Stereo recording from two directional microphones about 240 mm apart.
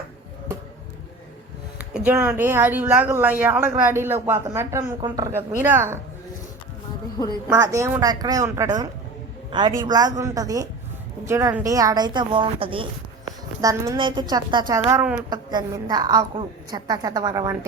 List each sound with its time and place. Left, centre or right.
1.9 s speech: centre
7.5 s speech: centre